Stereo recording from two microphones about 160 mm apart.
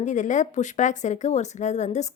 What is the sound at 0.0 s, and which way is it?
A woman's voice, 50° left (ahead or behind).